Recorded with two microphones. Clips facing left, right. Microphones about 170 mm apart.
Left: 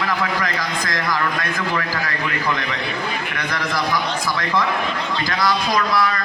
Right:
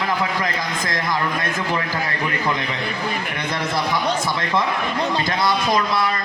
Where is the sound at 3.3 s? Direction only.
25° right (ahead or behind).